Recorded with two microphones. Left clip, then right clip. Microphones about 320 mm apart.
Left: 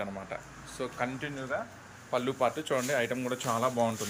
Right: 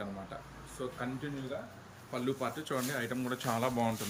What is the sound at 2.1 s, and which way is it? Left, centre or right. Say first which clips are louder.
Speech: left 7 dB; centre.